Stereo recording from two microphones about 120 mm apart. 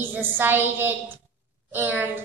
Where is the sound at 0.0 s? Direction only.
15° right (ahead or behind).